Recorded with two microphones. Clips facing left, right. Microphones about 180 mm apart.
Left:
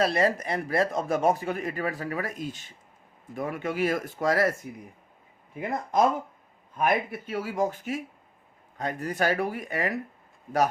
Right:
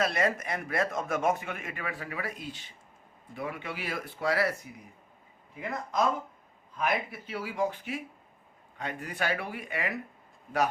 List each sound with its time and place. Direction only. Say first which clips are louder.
0.0 s a man's voice: left 4 dB; 35° left (ahead or behind)
5.5 s a man's voice: left 6 dB; 55° left (ahead or behind)